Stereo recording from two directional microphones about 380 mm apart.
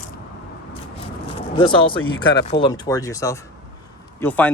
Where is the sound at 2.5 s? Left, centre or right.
Centre.